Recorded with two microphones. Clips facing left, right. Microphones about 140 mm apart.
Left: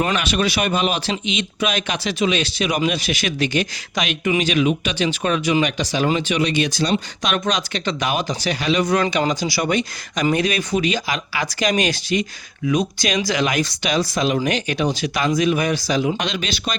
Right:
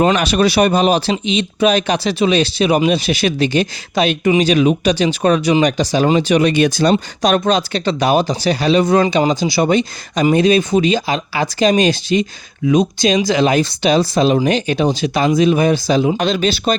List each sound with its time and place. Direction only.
0.0 s speech: 30° right (ahead or behind); by 6.9 s 50° right (ahead or behind)
6.9 s speech: 35° right (ahead or behind)